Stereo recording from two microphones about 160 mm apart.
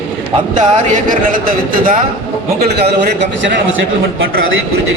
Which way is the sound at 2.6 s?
90° right.